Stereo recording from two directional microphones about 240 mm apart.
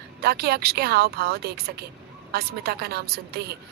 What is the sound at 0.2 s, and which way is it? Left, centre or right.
A woman's voice, right.